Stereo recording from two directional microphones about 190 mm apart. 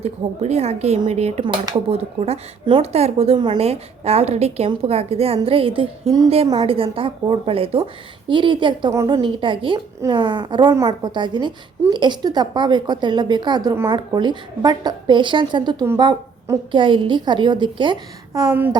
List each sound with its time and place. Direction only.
0.0 s a woman's voice: 35° right (ahead or behind)